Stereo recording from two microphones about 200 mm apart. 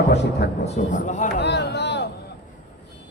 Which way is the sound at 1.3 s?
55° left (ahead or behind).